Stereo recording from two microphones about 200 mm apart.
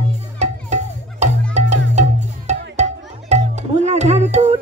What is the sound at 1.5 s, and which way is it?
Music, 35° right (ahead or behind).